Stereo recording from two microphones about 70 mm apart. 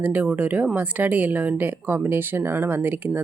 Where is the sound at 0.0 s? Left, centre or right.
Right.